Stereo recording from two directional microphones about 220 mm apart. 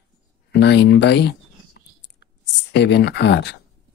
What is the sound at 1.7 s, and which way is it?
Clicking, 50° left (ahead or behind).